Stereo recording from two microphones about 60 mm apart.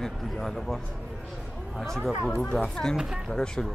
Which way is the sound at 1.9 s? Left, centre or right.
Centre.